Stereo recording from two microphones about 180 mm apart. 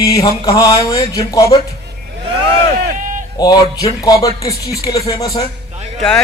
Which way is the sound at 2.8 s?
50° right (ahead or behind).